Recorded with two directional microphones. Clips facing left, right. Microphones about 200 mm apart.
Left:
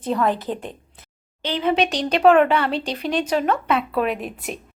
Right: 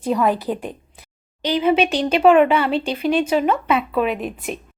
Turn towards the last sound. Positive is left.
turn(degrees=0)  # may be behind; listen again after turning